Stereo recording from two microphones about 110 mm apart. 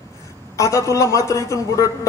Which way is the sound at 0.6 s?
25° left (ahead or behind).